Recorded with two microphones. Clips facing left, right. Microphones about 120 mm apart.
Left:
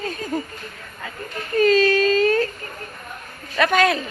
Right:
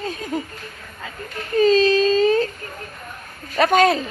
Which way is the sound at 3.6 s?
35° right (ahead or behind).